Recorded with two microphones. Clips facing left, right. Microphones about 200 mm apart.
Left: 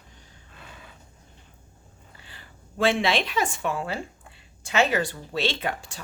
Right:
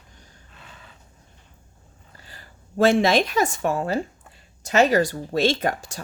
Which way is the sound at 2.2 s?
40° right (ahead or behind).